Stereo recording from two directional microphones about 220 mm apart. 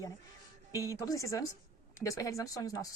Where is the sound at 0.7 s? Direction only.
15° left (ahead or behind).